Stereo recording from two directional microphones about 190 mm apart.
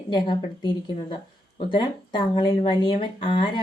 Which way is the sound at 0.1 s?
25° left (ahead or behind).